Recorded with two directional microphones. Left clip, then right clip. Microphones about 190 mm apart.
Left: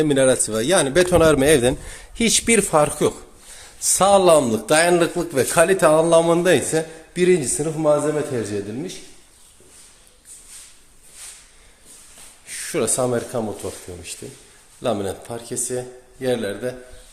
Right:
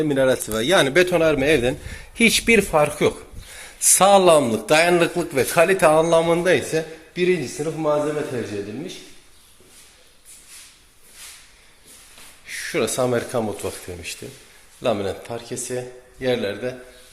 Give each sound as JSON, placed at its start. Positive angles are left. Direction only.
{"t": 0.0, "sound": "a man's voice", "side_deg": 20}
{"t": 2.0, "sound": "speech", "side_deg": 0}
{"t": 2.6, "sound": "a man's voice", "side_deg": 20}
{"t": 3.5, "sound": "a man's voice", "side_deg": 0}
{"t": 7.1, "sound": "speech", "side_deg": 30}
{"t": 12.5, "sound": "a man's voice", "side_deg": 20}